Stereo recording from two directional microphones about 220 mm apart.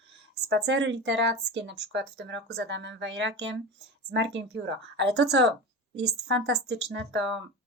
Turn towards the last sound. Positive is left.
turn(degrees=-55)  # may be behind; listen again after turning